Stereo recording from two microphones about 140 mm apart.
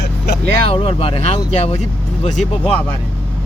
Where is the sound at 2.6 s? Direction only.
15° left (ahead or behind).